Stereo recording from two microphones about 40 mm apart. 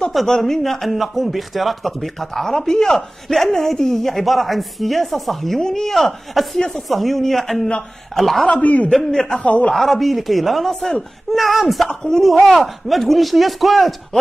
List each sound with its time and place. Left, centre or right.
0.3 s a man's voice: centre
8.5 s a man's voice: left
8.9 s speech: centre
9.4 s a man's voice: left
9.8 s a man's voice: centre
11.9 s speech: centre
12.2 s a man's voice: centre